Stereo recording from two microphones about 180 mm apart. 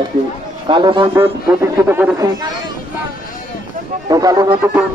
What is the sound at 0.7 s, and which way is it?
Speech, 25° right (ahead or behind).